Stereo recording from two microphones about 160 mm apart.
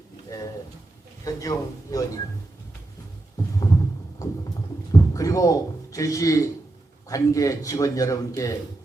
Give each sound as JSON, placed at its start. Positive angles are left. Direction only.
{"t": 0.3, "sound": "pigeon", "side_deg": 20}
{"t": 1.2, "sound": "a man's voice", "side_deg": 20}
{"t": 4.2, "sound": "a sound", "side_deg": 20}
{"t": 7.1, "sound": "a man's voice", "side_deg": 20}